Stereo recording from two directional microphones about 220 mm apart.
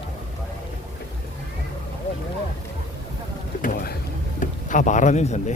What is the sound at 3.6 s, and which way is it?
Boat, 40° left (ahead or behind).